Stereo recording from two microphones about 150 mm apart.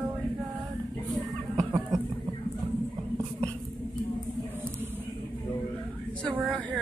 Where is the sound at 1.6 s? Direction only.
20° right (ahead or behind).